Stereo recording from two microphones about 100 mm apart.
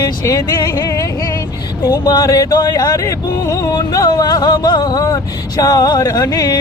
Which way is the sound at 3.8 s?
40° left (ahead or behind).